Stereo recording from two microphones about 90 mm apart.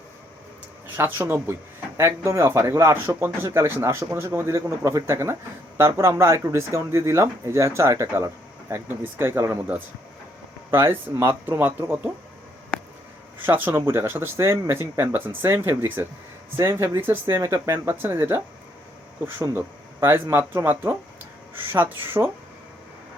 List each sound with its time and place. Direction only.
0.9 s speech: 25° right (ahead or behind)
10.7 s speech: 30° right (ahead or behind)
13.4 s speech: 25° right (ahead or behind)
19.5 s speech: 25° right (ahead or behind)